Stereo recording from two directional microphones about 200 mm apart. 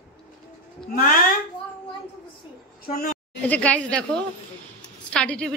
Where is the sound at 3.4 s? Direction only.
5° left (ahead or behind).